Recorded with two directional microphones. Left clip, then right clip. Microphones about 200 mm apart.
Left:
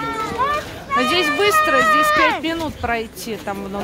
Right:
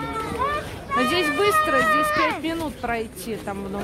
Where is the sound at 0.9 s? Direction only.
5° left (ahead or behind).